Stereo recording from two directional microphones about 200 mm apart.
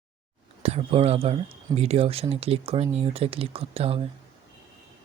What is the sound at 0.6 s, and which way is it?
Speech, 30° right (ahead or behind).